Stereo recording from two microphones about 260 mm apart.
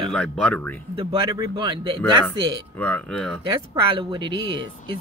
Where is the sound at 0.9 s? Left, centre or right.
Centre.